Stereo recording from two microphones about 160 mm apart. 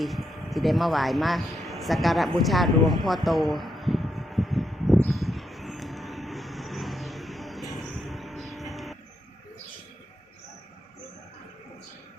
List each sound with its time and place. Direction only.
0.0 s speech: centre (ahead or behind)
5.0 s vehicle: centre (ahead or behind)